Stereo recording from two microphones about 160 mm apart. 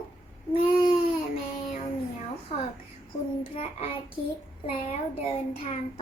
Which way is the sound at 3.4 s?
35° left (ahead or behind).